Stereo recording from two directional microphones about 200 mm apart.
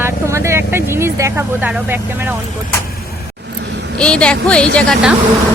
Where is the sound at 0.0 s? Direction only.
15° right (ahead or behind).